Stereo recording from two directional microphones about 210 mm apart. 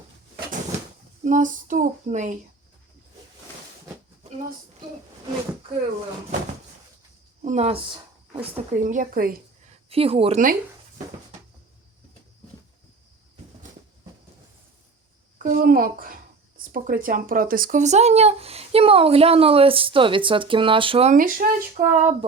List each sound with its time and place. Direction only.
1.2 s speech: 40° right (ahead or behind)
7.4 s speech: 30° right (ahead or behind)
9.9 s speech: 25° right (ahead or behind)
15.4 s speech: 40° right (ahead or behind)